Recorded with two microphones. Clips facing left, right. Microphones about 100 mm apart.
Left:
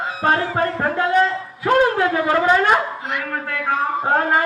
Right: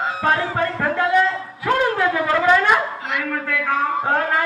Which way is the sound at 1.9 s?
25° left (ahead or behind).